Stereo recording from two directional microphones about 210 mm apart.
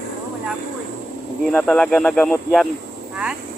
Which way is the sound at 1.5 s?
5° left (ahead or behind).